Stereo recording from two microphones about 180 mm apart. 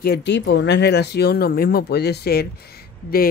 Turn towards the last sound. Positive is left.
turn(degrees=55)  # may be behind; listen again after turning